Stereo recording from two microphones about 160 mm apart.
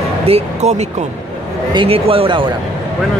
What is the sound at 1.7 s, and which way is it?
Speech, 35° right (ahead or behind).